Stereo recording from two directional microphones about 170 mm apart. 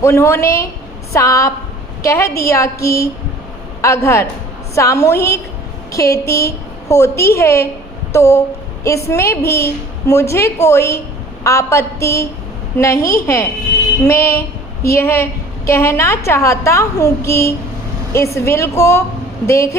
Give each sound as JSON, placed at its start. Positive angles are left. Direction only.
{"t": 0.0, "sound": "a woman's voice", "side_deg": 15}
{"t": 8.1, "sound": "a sound", "side_deg": 15}
{"t": 8.8, "sound": "a woman's voice", "side_deg": 15}